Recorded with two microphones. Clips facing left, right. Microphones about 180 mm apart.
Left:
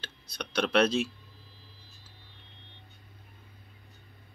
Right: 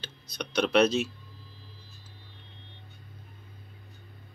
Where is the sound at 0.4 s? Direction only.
Centre (ahead or behind).